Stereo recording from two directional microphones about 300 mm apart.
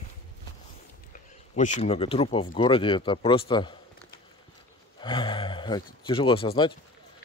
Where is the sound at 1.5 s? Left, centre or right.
Left.